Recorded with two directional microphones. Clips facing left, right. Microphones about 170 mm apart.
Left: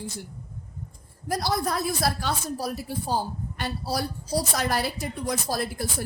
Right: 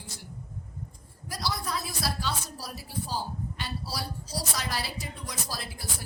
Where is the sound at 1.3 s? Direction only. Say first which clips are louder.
Left 7 dB; 50° left (ahead or behind).